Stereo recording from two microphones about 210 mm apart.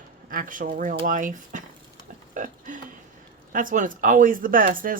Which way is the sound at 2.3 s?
40° right (ahead or behind).